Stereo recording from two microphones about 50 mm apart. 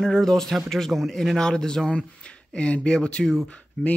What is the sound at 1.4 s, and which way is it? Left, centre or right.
Speech, centre.